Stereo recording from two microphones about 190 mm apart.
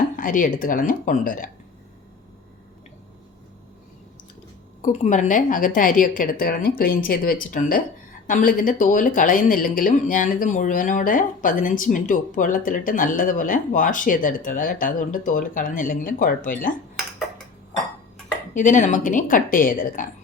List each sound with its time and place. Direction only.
0.2 s speech: 45° left (ahead or behind)
4.8 s speech: 40° left (ahead or behind)
18.5 s speech: 40° left (ahead or behind)